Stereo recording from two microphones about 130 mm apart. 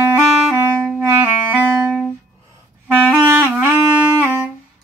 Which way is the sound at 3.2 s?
15° right (ahead or behind).